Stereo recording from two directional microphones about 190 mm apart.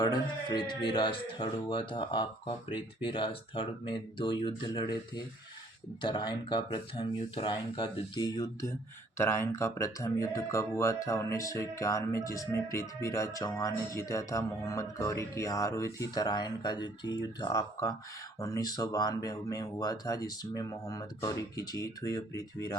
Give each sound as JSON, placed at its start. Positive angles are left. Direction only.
{"t": 0.0, "sound": "speech", "side_deg": 20}